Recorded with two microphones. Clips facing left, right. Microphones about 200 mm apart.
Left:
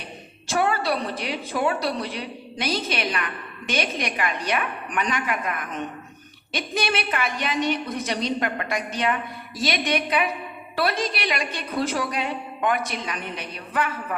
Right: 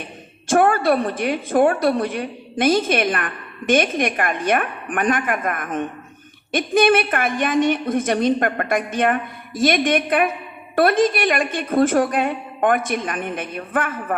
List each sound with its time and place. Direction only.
0.4 s a woman's voice: 50° right (ahead or behind)